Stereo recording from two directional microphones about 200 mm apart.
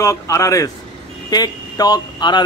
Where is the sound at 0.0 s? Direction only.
15° left (ahead or behind).